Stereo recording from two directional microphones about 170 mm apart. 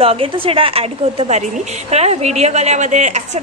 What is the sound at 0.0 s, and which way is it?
A woman's voice, 35° right (ahead or behind).